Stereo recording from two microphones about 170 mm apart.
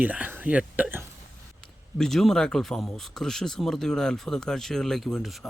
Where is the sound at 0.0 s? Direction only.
10° right (ahead or behind).